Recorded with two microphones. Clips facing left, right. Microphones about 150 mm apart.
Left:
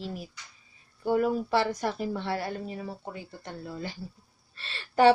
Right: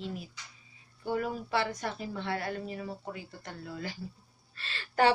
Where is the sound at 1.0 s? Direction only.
40° left (ahead or behind).